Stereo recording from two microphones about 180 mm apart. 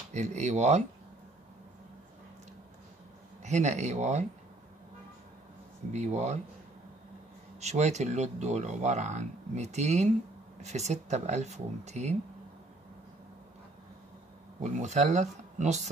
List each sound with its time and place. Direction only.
0.1 s speech: 40° right (ahead or behind)
3.4 s speech: 40° right (ahead or behind)
5.9 s speech: 40° right (ahead or behind)
7.6 s speech: 40° right (ahead or behind)
14.6 s speech: 40° right (ahead or behind)